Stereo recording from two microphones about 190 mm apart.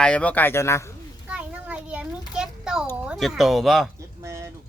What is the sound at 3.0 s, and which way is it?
Speech, centre (ahead or behind).